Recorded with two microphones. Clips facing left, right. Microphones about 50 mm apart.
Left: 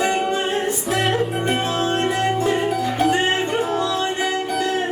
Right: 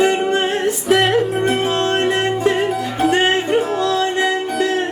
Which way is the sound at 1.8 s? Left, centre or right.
Right.